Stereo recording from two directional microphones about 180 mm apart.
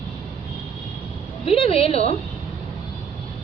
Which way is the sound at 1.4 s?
30° left (ahead or behind).